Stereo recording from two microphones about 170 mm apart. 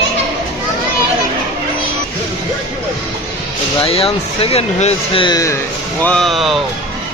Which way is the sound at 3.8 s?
35° left (ahead or behind).